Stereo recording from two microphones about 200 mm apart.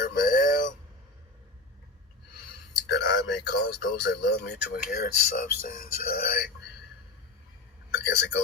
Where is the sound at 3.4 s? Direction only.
55° left (ahead or behind).